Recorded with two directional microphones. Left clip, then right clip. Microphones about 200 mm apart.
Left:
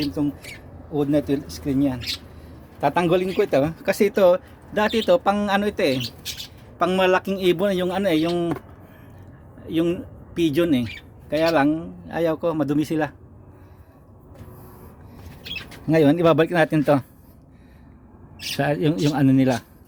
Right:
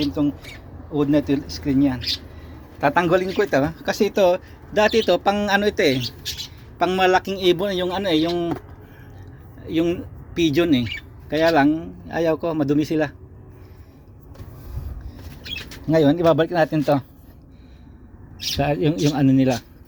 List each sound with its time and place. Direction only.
0.0 s speech: 5° left (ahead or behind); by 8.5 s 20° left (ahead or behind)
9.6 s speech: 10° left (ahead or behind)
15.9 s speech: 25° left (ahead or behind)
18.5 s speech: 15° left (ahead or behind)